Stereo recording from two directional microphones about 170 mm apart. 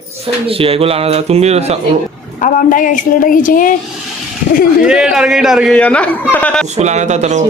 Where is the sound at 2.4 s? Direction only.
50° left (ahead or behind).